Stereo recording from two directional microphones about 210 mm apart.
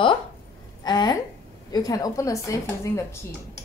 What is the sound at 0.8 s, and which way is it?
A woman's voice, 20° left (ahead or behind).